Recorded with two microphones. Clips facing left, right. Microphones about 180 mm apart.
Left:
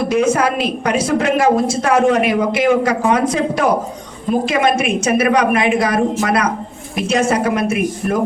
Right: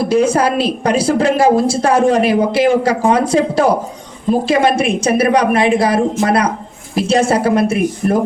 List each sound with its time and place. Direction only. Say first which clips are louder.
0.0 s a woman's voice: right 2 dB; 30° right (ahead or behind)